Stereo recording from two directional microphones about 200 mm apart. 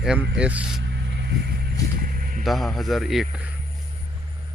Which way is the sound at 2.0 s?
45° right (ahead or behind).